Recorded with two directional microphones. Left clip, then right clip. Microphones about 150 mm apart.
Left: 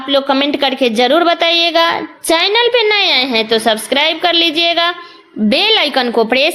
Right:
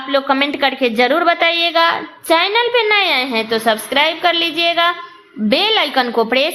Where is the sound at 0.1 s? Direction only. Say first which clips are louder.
Left 3 dB; 40° left (ahead or behind).